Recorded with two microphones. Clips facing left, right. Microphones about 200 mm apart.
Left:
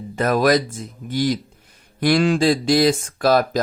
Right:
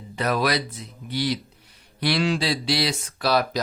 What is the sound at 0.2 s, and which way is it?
Speech, 45° left (ahead or behind).